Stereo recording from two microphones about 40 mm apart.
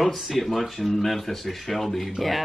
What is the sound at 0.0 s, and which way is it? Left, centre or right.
Speech, centre.